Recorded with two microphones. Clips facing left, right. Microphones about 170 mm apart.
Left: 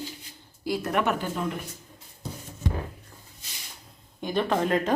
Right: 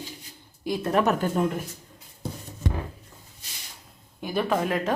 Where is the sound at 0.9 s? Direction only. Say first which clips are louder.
Right 4 dB; 35° right (ahead or behind).